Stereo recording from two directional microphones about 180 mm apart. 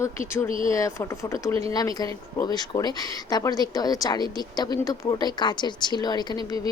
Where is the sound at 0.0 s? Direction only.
15° left (ahead or behind).